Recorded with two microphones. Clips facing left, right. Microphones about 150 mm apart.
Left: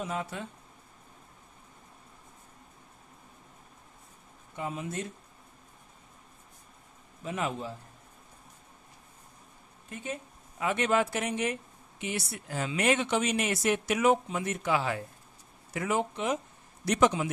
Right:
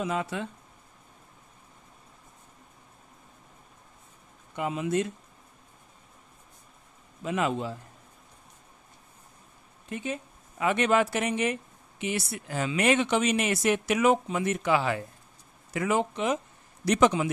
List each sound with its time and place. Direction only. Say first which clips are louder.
0.0 s speech: right 5 dB; 90° right
4.6 s speech: right 7 dB; 90° right
7.2 s speech: right 5 dB; 90° right
9.8 s speech: right 5 dB; 90° right
10.6 s speech: right 3 dB; 75° right (ahead or behind)